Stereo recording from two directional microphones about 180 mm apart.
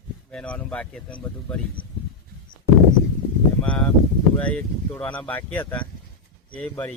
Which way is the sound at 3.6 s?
10° left (ahead or behind).